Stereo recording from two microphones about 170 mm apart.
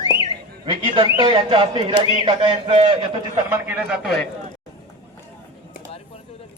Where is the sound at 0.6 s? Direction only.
30° right (ahead or behind).